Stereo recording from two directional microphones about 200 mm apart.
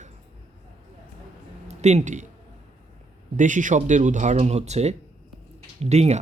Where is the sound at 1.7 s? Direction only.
35° right (ahead or behind).